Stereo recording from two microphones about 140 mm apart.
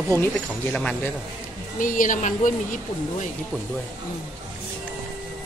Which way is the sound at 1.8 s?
75° left (ahead or behind).